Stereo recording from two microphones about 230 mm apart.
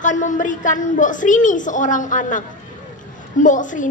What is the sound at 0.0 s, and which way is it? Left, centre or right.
Female singing, left.